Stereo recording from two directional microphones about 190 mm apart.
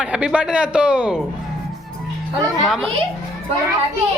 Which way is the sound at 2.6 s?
Centre (ahead or behind).